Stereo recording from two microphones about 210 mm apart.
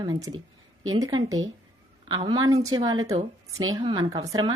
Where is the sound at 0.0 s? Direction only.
20° right (ahead or behind).